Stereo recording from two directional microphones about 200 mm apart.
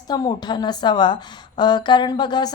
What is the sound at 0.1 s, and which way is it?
A woman's voice, 20° left (ahead or behind).